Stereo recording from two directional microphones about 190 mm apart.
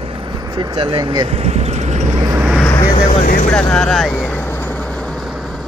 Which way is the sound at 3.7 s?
Centre (ahead or behind).